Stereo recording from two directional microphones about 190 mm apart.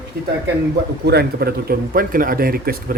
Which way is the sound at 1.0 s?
55° right (ahead or behind).